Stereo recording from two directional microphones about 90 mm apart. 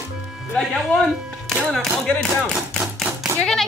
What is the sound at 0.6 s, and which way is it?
Music, centre (ahead or behind).